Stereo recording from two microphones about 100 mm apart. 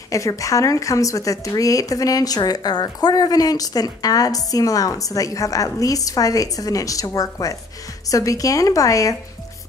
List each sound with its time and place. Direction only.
0.1 s speech: 35° left (ahead or behind)